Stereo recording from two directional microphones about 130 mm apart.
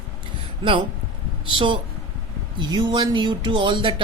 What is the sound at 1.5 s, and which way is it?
Speech, 40° right (ahead or behind).